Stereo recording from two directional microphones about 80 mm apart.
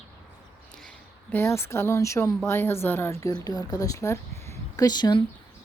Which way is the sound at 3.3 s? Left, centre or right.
Left.